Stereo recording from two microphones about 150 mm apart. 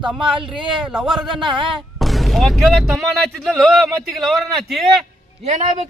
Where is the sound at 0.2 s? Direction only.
35° right (ahead or behind).